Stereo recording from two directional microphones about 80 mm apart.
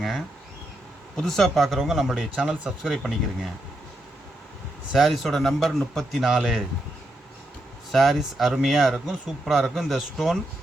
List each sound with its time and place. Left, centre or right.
1.1 s speech: centre
4.9 s speech: centre
7.9 s speech: centre